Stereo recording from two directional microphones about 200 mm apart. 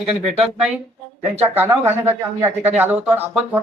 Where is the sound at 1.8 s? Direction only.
10° right (ahead or behind).